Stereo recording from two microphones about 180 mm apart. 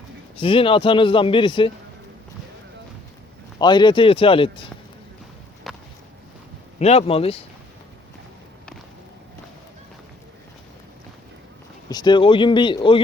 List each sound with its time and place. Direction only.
0.3 s a man's voice: 30° left (ahead or behind)
3.6 s a man's voice: 25° left (ahead or behind)
5.7 s a sound: centre (ahead or behind)
6.7 s speech: 35° left (ahead or behind)
11.9 s a man's voice: 25° left (ahead or behind)